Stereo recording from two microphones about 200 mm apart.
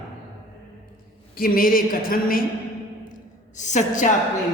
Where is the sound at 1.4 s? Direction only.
45° left (ahead or behind).